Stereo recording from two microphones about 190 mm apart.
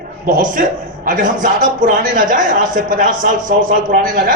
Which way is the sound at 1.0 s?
45° right (ahead or behind).